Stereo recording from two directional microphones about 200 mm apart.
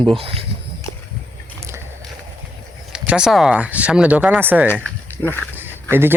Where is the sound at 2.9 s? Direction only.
5° right (ahead or behind).